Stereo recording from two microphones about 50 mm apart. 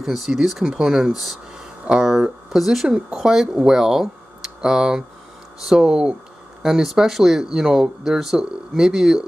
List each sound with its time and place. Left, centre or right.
0.0 s speech: centre